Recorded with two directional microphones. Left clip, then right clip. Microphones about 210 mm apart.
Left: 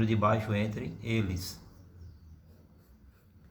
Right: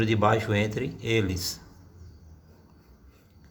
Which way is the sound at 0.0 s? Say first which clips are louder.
Right 5 dB; 35° right (ahead or behind).